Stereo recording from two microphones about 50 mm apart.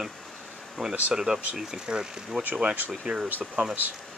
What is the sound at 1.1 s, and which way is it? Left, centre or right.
Speech, centre.